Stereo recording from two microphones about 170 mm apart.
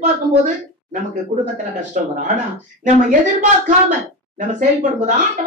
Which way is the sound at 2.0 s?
50° right (ahead or behind).